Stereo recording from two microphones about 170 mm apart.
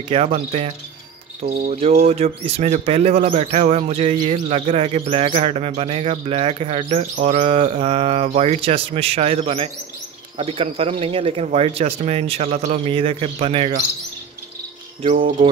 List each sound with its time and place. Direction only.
0.1 s speech: 35° right (ahead or behind)
1.4 s cricket: 65° right (ahead or behind)
1.7 s speech: 40° right (ahead or behind)
15.0 s a sound: 50° right (ahead or behind)